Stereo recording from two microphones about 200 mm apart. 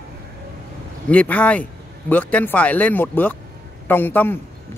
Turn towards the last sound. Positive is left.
turn(degrees=10)  # may be behind; listen again after turning